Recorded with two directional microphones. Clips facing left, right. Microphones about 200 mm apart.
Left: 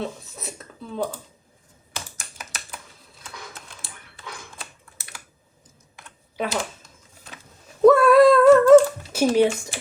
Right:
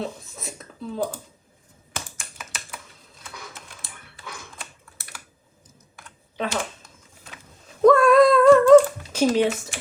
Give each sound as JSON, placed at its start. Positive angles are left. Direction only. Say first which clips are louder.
{"t": 0.0, "sound": "a sound", "louder": "even", "side_deg": 0}
{"t": 1.9, "sound": "typing", "louder": "right 1 dB", "side_deg": -50}
{"t": 6.3, "sound": "speech", "louder": "left 1 dB", "side_deg": 10}
{"t": 7.8, "sound": "humming", "louder": "left 1 dB", "side_deg": 5}